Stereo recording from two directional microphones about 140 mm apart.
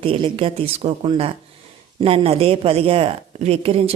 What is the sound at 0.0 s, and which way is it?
A woman's voice, 40° right (ahead or behind).